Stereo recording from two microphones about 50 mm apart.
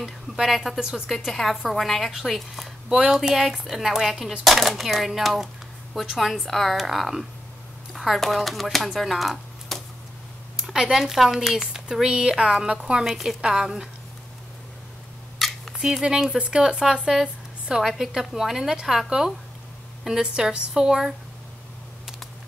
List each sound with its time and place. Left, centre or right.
0.4 s a woman's voice: centre
0.7 s a woman's voice: centre
8.9 s a sound: centre
10.6 s speech: centre
13.0 s speech: centre
15.3 s a sound: centre
15.7 s speech: centre